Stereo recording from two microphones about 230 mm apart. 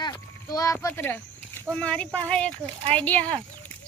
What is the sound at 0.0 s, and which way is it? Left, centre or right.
A child's voice, centre.